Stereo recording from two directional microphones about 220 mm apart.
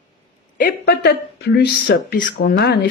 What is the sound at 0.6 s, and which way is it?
Speech, 45° left (ahead or behind).